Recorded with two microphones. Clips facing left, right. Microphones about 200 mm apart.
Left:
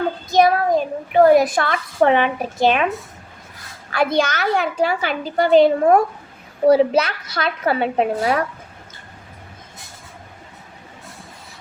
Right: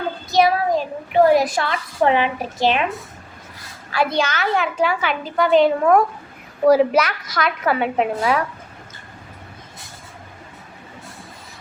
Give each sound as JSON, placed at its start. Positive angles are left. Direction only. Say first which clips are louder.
{"t": 0.3, "sound": "child singing", "louder": "left 1 dB", "side_deg": 50}
{"t": 1.4, "sound": "a woman's voice", "louder": "left 3 dB", "side_deg": 55}
{"t": 3.9, "sound": "a woman's voice", "louder": "left 2 dB", "side_deg": 50}